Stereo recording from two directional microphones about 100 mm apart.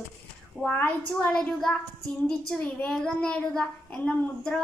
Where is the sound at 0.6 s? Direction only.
10° left (ahead or behind).